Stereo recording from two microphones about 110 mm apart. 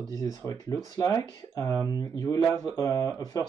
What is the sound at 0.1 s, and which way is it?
Speech, 35° left (ahead or behind).